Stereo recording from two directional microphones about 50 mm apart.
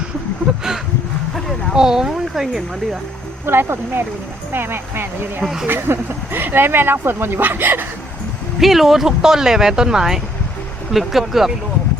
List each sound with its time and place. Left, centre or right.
0.5 s speech: centre
1.7 s speech: centre
3.4 s speech: right
8.6 s speech: centre